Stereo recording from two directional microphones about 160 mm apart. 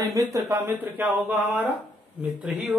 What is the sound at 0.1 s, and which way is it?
Speech, 20° right (ahead or behind).